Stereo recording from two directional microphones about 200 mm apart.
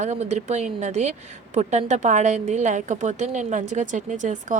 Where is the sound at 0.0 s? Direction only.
35° right (ahead or behind).